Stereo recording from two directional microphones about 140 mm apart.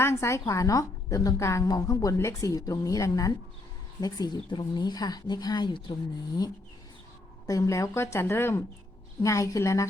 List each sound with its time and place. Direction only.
0.0 s a woman's voice: 20° left (ahead or behind)